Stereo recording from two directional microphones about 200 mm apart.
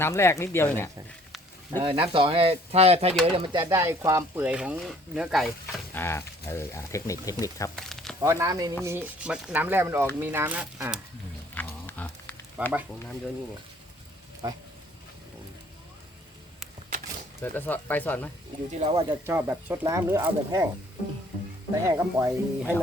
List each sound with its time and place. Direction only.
0.0 s speech: 15° left (ahead or behind)
1.7 s speech: 25° right (ahead or behind); by 6.0 s centre (ahead or behind)
6.0 s speech: 10° left (ahead or behind)
7.8 s a sound: centre (ahead or behind)
8.2 s speech: 15° right (ahead or behind)
11.5 s a sound: 10° left (ahead or behind)
12.6 s speech: 5° right (ahead or behind)
17.4 s speech: 10° left (ahead or behind)
18.9 s speech: 10° right (ahead or behind)
21.8 s speech: 15° right (ahead or behind)